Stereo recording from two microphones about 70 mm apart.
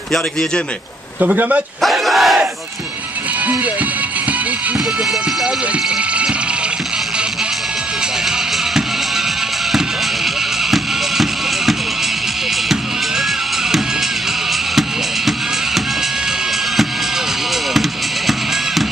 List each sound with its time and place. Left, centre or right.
1.2 s speech: right
1.8 s battle cry: centre
10.7 s music: centre
14.8 s music: centre